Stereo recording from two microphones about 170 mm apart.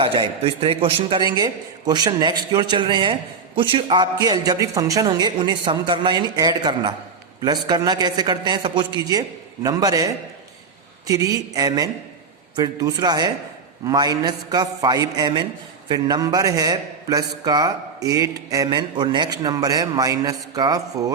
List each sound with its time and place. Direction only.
0.0 s a man's voice: 30° right (ahead or behind)